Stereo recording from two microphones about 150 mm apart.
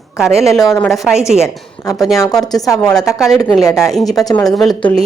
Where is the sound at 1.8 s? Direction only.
20° left (ahead or behind).